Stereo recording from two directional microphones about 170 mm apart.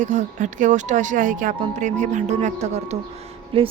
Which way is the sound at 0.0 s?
45° right (ahead or behind).